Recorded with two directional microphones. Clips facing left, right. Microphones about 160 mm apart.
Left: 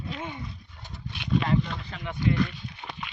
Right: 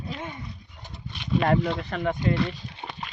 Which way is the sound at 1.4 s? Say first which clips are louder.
Right 5 dB; 60° right (ahead or behind).